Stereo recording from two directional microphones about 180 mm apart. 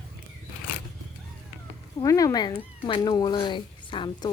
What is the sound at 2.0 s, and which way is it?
Speech, 20° left (ahead or behind).